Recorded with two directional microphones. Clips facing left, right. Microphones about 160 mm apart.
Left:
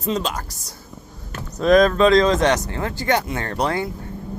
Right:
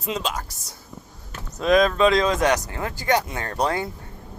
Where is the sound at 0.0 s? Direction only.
5° right (ahead or behind).